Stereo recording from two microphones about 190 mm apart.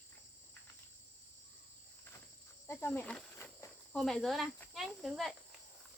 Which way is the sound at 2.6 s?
10° left (ahead or behind).